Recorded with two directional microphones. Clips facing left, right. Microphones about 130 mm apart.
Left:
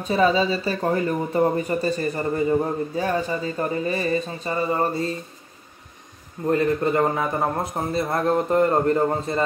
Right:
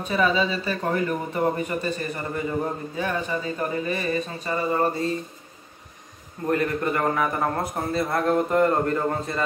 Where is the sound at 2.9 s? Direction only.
35° left (ahead or behind).